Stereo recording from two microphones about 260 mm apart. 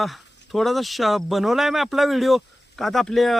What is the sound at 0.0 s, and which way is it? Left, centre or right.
Speech, centre.